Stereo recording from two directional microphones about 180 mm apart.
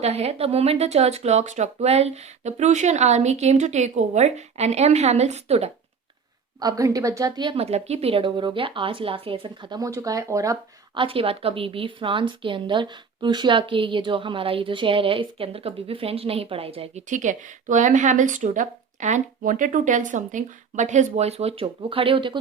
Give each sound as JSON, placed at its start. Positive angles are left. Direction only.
{"t": 0.0, "sound": "speech", "side_deg": -35}
{"t": 6.6, "sound": "speech", "side_deg": -20}